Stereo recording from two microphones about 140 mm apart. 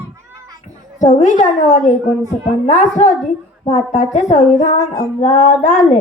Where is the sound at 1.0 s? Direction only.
55° left (ahead or behind).